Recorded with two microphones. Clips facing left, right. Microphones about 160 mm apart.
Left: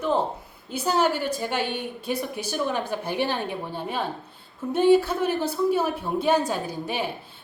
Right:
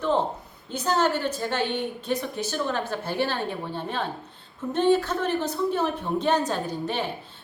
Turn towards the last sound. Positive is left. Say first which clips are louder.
# right 1 dB
turn(degrees=10)  # may be behind; listen again after turning